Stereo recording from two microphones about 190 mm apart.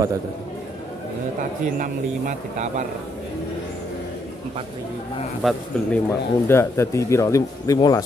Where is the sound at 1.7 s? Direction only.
45° right (ahead or behind).